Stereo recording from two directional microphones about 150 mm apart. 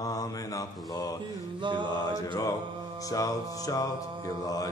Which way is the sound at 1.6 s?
35° right (ahead or behind).